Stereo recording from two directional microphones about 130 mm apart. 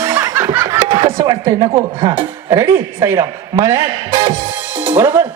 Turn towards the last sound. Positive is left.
turn(degrees=-20)  # may be behind; listen again after turning